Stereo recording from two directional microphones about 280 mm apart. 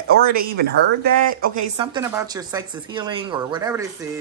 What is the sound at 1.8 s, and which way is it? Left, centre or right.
A woman's voice, centre.